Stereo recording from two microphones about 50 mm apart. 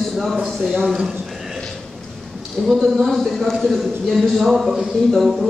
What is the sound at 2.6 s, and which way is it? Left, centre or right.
Speech, centre.